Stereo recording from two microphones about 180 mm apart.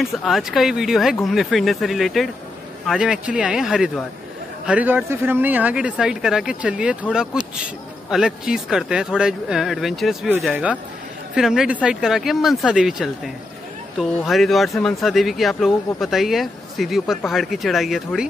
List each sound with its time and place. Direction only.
0.0 s speech: centre (ahead or behind)